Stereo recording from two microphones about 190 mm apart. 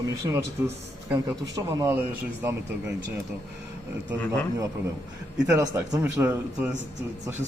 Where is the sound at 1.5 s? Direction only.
15° right (ahead or behind).